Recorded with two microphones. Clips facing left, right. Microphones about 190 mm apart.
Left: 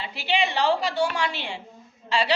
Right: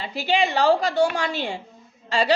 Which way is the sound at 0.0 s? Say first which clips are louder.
Right 3 dB; 45° right (ahead or behind).